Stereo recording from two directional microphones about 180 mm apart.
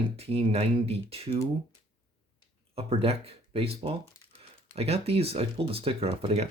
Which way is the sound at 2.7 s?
35° right (ahead or behind).